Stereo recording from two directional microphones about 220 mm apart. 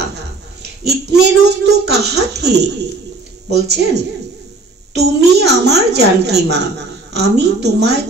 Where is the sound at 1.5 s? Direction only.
50° right (ahead or behind).